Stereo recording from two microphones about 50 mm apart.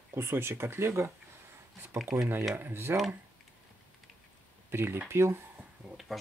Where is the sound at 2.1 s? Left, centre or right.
Right.